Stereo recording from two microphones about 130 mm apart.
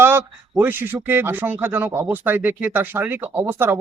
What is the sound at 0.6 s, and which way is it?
Speech, 15° right (ahead or behind).